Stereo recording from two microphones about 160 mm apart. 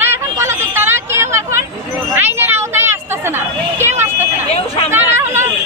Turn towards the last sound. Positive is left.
turn(degrees=-15)  # may be behind; listen again after turning